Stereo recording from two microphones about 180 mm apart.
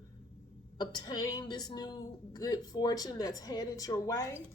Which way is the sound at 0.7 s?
20° left (ahead or behind).